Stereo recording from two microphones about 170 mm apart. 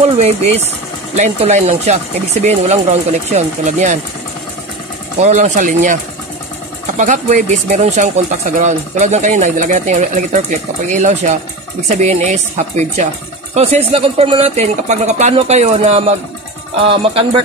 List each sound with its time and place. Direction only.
0.2 s speech: 40° right (ahead or behind)
5.2 s speech: 45° right (ahead or behind)
7.0 s speech: 45° right (ahead or behind)